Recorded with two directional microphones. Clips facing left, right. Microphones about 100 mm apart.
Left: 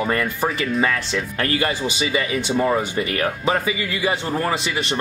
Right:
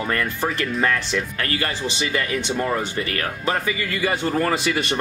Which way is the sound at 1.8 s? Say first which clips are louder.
Left 2 dB; 10° left (ahead or behind).